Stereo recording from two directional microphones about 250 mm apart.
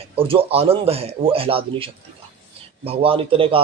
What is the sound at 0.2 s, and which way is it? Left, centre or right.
Speech, right.